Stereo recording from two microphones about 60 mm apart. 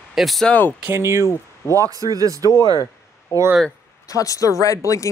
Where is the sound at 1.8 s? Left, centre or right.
Right.